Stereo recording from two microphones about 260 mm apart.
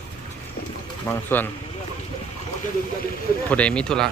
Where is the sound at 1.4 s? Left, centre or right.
Centre.